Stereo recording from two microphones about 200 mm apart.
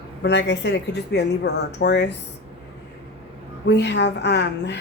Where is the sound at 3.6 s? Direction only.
60° left (ahead or behind).